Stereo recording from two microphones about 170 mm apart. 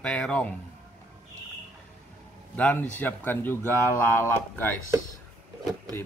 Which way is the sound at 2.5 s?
10° left (ahead or behind).